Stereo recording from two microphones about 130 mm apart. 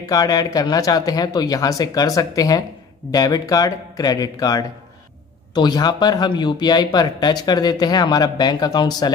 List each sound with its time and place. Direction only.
0.0 s a man's voice: 30° left (ahead or behind)